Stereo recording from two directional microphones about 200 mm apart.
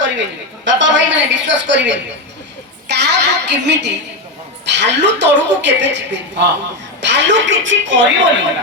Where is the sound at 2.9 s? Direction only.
60° right (ahead or behind).